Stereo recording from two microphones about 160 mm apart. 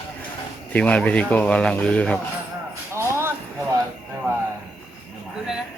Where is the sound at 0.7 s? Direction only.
10° left (ahead or behind).